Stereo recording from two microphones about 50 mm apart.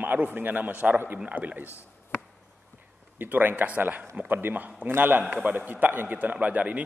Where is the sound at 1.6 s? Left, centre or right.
Left.